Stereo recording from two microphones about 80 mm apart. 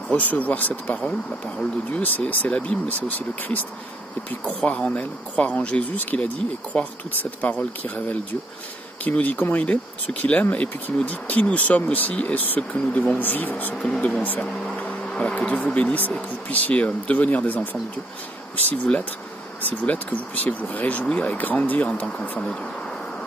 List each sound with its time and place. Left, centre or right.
0.1 s speech: centre
18.7 s speech: centre